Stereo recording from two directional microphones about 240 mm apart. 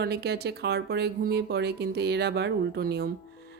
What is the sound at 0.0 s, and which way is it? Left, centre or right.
A woman's voice, right.